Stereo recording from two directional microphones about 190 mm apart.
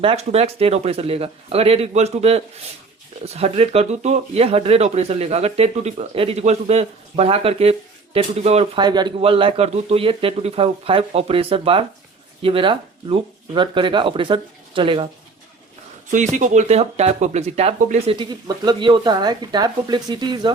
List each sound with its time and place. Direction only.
0.0 s speech: 30° right (ahead or behind)
16.1 s speech: 40° right (ahead or behind); by 20.5 s 25° right (ahead or behind)